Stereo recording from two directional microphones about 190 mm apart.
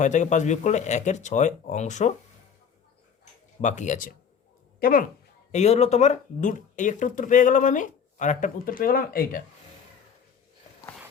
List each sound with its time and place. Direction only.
0.0 s speech: 40° left (ahead or behind)
3.6 s speech: 40° left (ahead or behind)
5.5 s speech: 35° left (ahead or behind)